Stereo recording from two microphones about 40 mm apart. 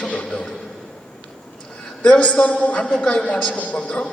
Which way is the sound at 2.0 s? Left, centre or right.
Left.